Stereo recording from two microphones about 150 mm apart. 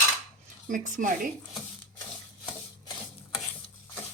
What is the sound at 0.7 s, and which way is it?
Speech, 60° right (ahead or behind).